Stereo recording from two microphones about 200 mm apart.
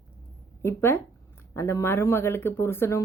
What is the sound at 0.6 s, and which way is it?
Speech, 10° left (ahead or behind).